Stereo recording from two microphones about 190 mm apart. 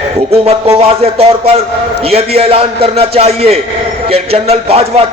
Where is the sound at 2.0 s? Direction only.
30° right (ahead or behind).